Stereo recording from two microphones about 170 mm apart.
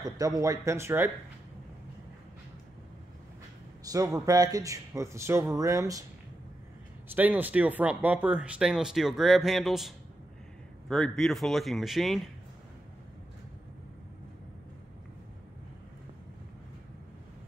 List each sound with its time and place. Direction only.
0.4 s speech: 20° right (ahead or behind)
3.8 s a man's voice: 20° right (ahead or behind)
7.1 s speech: 10° right (ahead or behind)